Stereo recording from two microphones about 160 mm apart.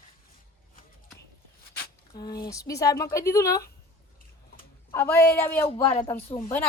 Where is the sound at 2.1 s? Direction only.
25° left (ahead or behind).